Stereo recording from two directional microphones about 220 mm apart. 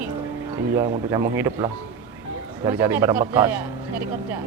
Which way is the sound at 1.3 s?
10° right (ahead or behind).